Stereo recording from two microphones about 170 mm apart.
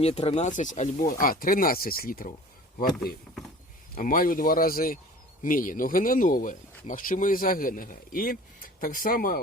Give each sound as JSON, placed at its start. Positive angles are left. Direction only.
{"t": 0.0, "sound": "speech", "side_deg": 35}